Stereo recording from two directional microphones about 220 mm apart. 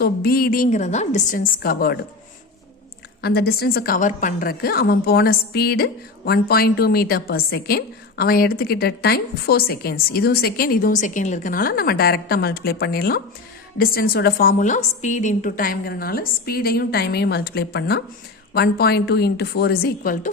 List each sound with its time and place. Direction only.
0.0 s a woman's voice: 45° left (ahead or behind)
3.2 s a woman's voice: 45° left (ahead or behind)